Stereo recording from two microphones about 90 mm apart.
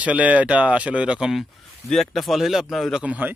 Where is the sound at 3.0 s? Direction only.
15° right (ahead or behind).